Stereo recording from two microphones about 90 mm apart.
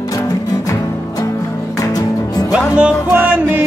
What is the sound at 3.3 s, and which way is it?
Music, 20° right (ahead or behind).